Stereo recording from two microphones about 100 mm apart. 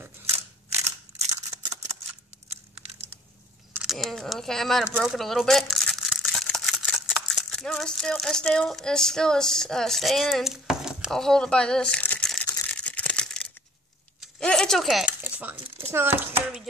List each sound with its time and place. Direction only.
1.3 s scissors: 35° right (ahead or behind)
2.5 s crumpling: 90° right
3.8 s speech: centre (ahead or behind)
5.0 s crumpling: centre (ahead or behind)
6.9 s speech: 5° left (ahead or behind)
11.1 s speech: 5° left (ahead or behind)
12.6 s a sound: 15° left (ahead or behind)
15.0 s a sound: 15° right (ahead or behind)
15.9 s speech: 20° right (ahead or behind)